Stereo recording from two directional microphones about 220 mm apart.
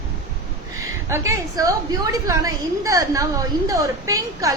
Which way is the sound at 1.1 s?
15° right (ahead or behind).